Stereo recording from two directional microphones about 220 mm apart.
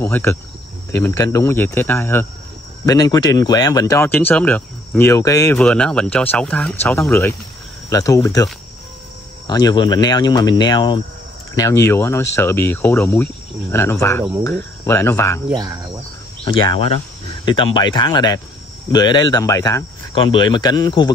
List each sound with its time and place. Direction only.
0.0 s speech: 10° left (ahead or behind)
9.5 s speech: 20° left (ahead or behind)
15.5 s insect: 15° right (ahead or behind)
16.4 s speech: 20° left (ahead or behind)